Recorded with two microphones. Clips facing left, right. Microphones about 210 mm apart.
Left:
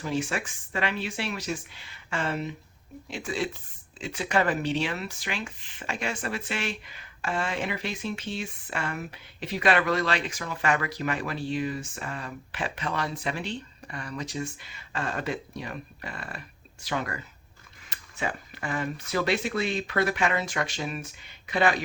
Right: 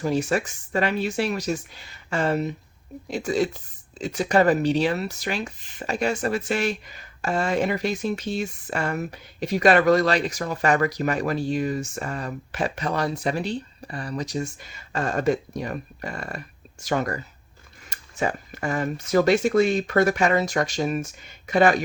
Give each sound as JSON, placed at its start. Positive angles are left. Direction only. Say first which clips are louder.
{"t": 0.0, "sound": "speech", "louder": "right 6 dB", "side_deg": -40}